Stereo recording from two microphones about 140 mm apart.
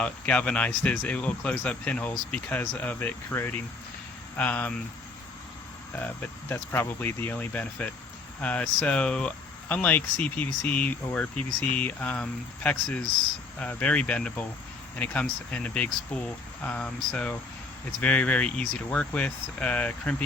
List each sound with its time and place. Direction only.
0.0 s speech: 10° left (ahead or behind)
6.5 s speech: 15° left (ahead or behind)